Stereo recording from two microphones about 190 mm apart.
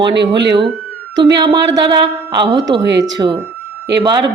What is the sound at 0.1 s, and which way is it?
Speech, 65° right (ahead or behind).